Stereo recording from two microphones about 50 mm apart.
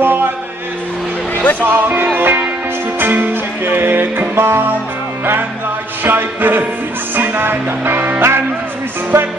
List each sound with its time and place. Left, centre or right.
0.0 s music: right
1.6 s speech: right
3.0 s music: right
6.0 s music: right
9.1 s music: right